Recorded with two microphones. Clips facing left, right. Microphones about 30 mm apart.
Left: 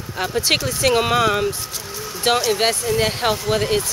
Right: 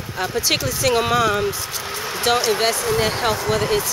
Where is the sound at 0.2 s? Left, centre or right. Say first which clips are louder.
Left 1 dB; centre.